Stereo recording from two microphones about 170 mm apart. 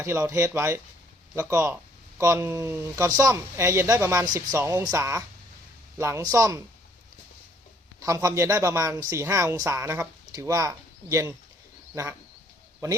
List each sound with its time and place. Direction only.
0.0 s speech: 15° right (ahead or behind)
7.9 s speech: 20° right (ahead or behind)